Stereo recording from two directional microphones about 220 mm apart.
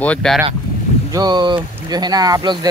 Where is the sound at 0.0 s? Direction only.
5° left (ahead or behind).